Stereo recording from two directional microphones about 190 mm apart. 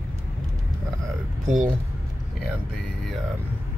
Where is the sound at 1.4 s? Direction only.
40° right (ahead or behind).